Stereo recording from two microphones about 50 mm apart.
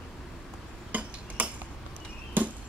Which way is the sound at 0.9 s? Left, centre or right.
Right.